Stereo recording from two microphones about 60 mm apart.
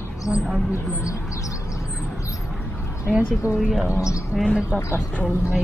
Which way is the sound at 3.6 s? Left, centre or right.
Centre.